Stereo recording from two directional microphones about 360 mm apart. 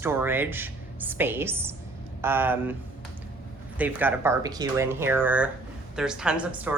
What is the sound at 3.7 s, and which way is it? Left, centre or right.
Speech, centre.